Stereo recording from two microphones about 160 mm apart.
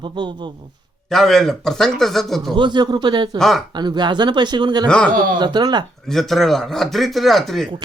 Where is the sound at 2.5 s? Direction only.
30° right (ahead or behind).